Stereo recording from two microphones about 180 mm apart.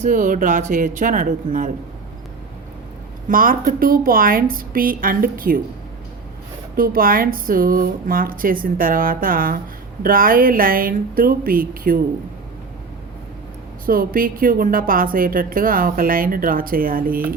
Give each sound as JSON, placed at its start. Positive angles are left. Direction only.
{"t": 0.0, "sound": "a woman's voice", "side_deg": -45}
{"t": 3.2, "sound": "a woman's voice", "side_deg": -50}
{"t": 6.7, "sound": "a woman's voice", "side_deg": -55}
{"t": 13.8, "sound": "a woman's voice", "side_deg": -55}